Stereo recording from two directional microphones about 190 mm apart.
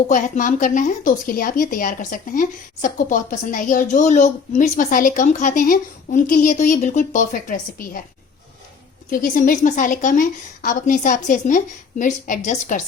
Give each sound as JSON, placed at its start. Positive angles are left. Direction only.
{"t": 0.1, "sound": "a woman's voice", "side_deg": 40}
{"t": 9.0, "sound": "a woman's voice", "side_deg": 45}